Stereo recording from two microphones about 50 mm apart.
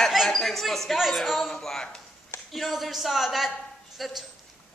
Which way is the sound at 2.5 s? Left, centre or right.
Centre.